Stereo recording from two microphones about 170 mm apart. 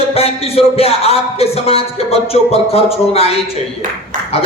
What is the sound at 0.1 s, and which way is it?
Speech, 35° left (ahead or behind).